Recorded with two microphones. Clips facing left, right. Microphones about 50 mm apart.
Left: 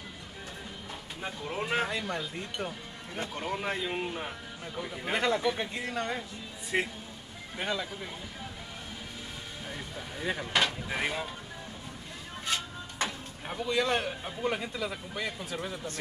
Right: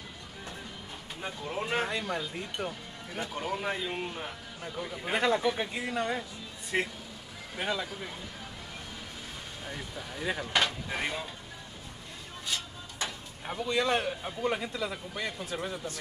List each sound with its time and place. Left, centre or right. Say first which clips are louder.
1.2 s a man's voice: even; centre
9.7 s a man's voice: right 1 dB; centre
13.5 s a man's voice: even; centre